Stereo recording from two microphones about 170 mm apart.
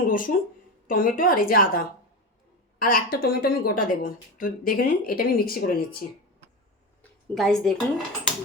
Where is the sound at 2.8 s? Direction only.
60° left (ahead or behind).